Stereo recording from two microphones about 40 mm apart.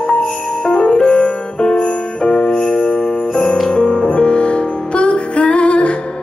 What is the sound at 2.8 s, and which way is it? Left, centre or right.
Jingle bell, left.